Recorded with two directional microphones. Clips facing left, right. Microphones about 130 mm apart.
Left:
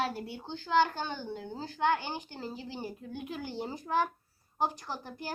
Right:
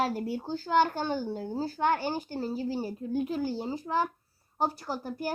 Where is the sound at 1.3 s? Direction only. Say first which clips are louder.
Right 7 dB; 40° right (ahead or behind).